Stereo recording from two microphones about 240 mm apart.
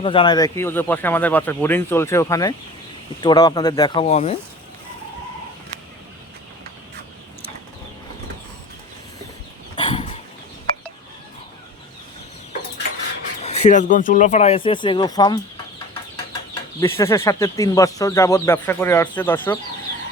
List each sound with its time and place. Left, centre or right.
0.0 s speech: left
9.7 s a sound: left
13.4 s speech: left
16.8 s speech: centre